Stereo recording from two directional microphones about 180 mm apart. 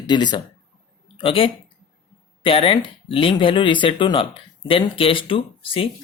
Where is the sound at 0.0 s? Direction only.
25° left (ahead or behind).